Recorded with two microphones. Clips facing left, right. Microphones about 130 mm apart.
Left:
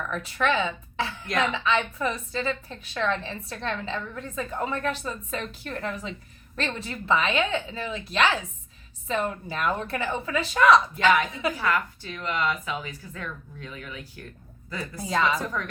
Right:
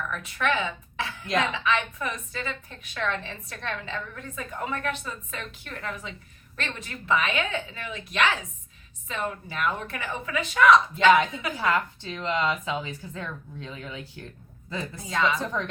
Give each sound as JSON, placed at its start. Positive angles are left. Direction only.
{"t": 0.1, "sound": "a woman's voice", "side_deg": 30}
{"t": 1.3, "sound": "speech", "side_deg": -25}
{"t": 1.5, "sound": "a woman's voice", "side_deg": 30}
{"t": 10.9, "sound": "speech", "side_deg": -25}
{"t": 15.0, "sound": "a woman's voice", "side_deg": 25}
{"t": 15.4, "sound": "speech", "side_deg": -25}